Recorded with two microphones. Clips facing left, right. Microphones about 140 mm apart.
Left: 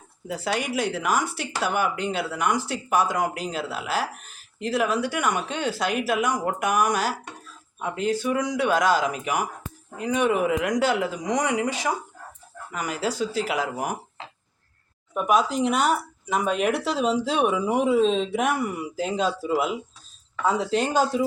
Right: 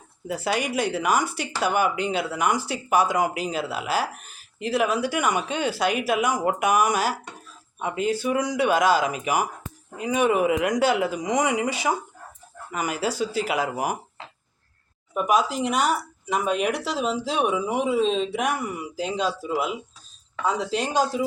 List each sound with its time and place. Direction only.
0.3 s speech: 5° right (ahead or behind)
15.1 s speech: centre (ahead or behind)